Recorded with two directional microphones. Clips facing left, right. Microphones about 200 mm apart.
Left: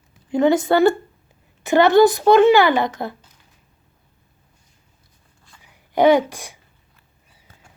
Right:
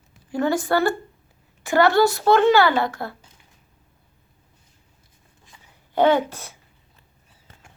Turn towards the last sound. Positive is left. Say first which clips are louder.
# left 4 dB
turn(degrees=15)  # may be behind; listen again after turning